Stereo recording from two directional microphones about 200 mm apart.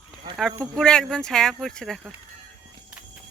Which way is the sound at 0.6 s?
5° left (ahead or behind).